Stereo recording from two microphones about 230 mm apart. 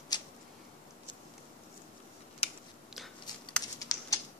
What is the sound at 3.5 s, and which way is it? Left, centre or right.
Computer keyboard, centre.